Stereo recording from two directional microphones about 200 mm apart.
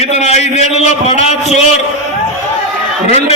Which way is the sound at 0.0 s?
30° left (ahead or behind).